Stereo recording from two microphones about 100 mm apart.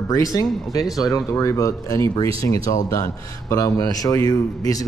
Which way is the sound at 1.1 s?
35° left (ahead or behind).